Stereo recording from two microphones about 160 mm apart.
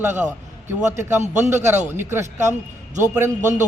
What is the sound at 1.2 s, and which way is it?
Speech, 45° right (ahead or behind).